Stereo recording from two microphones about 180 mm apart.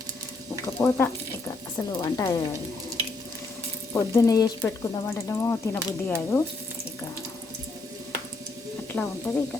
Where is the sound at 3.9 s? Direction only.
20° left (ahead or behind).